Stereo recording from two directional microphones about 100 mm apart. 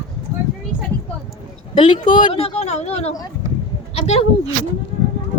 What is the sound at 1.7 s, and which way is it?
Speech, 55° left (ahead or behind).